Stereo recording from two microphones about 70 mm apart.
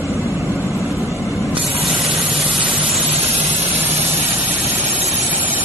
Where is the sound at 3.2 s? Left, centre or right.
Right.